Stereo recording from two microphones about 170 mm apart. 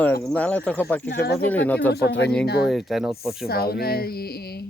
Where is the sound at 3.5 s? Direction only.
65° left (ahead or behind).